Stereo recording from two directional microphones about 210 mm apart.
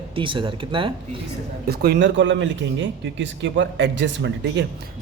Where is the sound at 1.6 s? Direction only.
50° right (ahead or behind).